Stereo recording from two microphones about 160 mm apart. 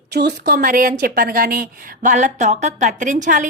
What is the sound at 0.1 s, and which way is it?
Speech, 85° right.